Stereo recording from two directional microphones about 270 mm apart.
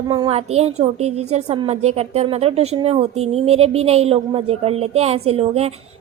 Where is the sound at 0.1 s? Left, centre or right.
Centre.